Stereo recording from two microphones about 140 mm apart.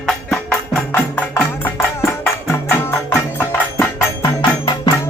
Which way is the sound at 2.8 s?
15° left (ahead or behind).